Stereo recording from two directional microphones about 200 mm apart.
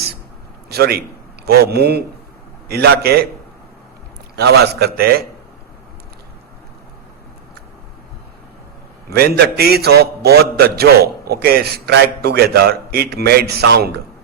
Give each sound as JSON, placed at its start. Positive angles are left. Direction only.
{"t": 0.7, "sound": "a man's voice", "side_deg": -50}
{"t": 4.4, "sound": "a man's voice", "side_deg": -55}
{"t": 9.0, "sound": "a man's voice", "side_deg": -50}